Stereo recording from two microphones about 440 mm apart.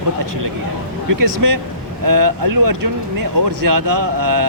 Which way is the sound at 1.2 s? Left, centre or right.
Right.